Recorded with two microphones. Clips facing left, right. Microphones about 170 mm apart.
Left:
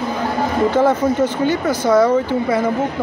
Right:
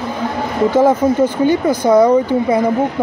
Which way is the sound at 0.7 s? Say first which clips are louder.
Right 5 dB; 10° right (ahead or behind).